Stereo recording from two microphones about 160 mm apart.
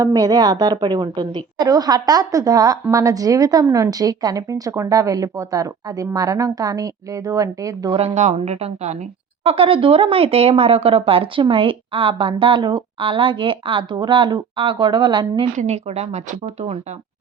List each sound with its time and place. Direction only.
0.0 s a woman's voice: 20° right (ahead or behind)
7.9 s speech: 40° right (ahead or behind)
15.5 s speech: 45° right (ahead or behind)